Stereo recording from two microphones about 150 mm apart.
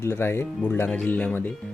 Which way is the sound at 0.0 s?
15° left (ahead or behind).